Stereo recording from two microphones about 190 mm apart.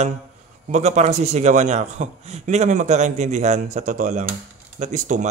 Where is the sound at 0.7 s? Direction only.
35° right (ahead or behind).